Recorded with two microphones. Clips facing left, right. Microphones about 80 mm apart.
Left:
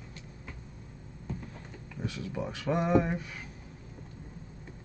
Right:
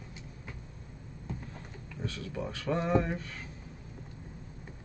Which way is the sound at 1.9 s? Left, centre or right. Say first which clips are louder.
Left 2 dB; centre.